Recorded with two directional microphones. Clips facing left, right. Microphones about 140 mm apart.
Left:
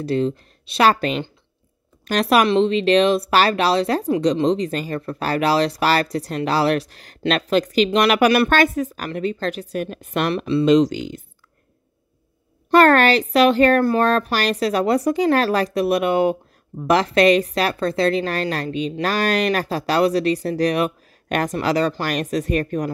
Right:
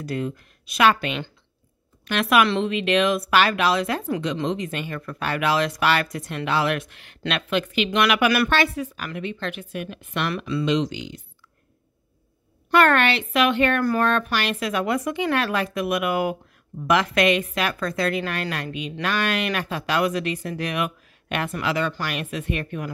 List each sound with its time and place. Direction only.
0.0 s a woman's voice: 30° left (ahead or behind)
2.4 s a woman's voice: 25° left (ahead or behind)
10.3 s speech: 25° left (ahead or behind)
10.6 s speech: 45° left (ahead or behind)
12.7 s a woman's voice: 40° left (ahead or behind)